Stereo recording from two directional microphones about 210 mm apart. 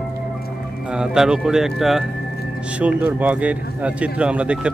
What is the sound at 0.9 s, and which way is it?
Speech, 5° right (ahead or behind).